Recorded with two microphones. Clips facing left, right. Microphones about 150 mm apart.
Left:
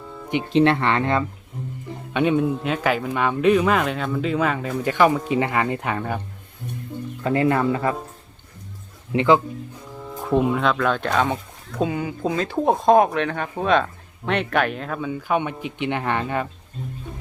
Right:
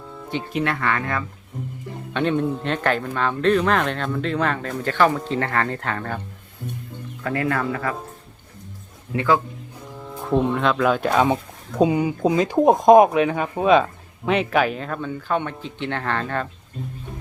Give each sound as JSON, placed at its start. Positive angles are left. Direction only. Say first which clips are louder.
{"t": 0.5, "sound": "speech", "louder": "left 6 dB", "side_deg": 25}
{"t": 2.1, "sound": "speech", "louder": "left 2 dB", "side_deg": 10}
{"t": 7.3, "sound": "speech", "louder": "left 4 dB", "side_deg": 20}
{"t": 9.1, "sound": "speech", "louder": "left 3 dB", "side_deg": 20}
{"t": 10.1, "sound": "speech", "louder": "left 1 dB", "side_deg": 0}